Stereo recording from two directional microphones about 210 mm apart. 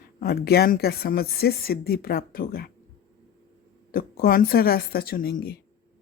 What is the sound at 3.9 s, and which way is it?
Speech, 45° left (ahead or behind).